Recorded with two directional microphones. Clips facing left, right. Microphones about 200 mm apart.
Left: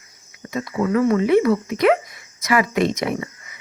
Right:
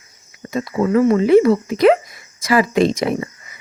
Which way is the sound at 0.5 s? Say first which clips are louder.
Right 4 dB; 30° right (ahead or behind).